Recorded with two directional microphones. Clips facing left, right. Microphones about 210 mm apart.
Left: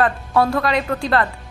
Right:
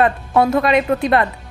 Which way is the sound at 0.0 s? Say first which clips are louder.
Right 2 dB; 20° right (ahead or behind).